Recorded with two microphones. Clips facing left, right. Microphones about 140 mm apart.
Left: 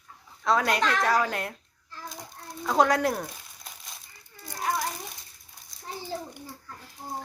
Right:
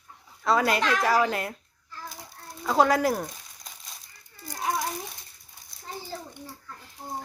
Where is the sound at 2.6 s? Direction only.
5° right (ahead or behind).